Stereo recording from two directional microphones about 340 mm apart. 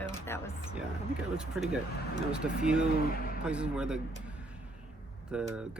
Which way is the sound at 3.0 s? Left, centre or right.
Left.